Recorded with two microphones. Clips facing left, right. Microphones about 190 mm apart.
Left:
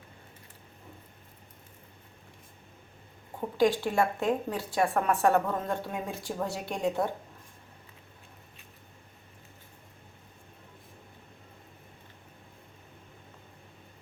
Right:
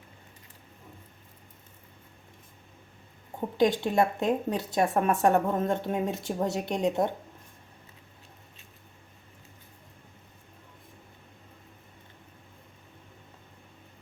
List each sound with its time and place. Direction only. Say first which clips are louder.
3.6 s a woman's voice: right 1 dB; 20° right (ahead or behind)